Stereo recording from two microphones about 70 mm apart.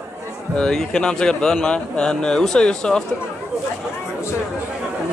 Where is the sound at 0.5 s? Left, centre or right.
Centre.